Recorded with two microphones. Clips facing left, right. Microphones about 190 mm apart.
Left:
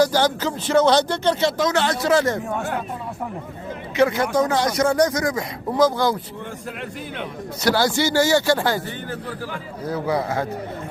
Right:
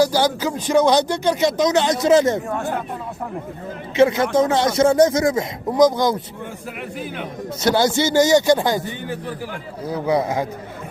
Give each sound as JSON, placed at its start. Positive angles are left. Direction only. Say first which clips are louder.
{"t": 0.0, "sound": "speech", "louder": "right 1 dB", "side_deg": -10}
{"t": 3.9, "sound": "speech", "louder": "right 3 dB", "side_deg": -25}
{"t": 7.6, "sound": "speech", "louder": "right 2 dB", "side_deg": -20}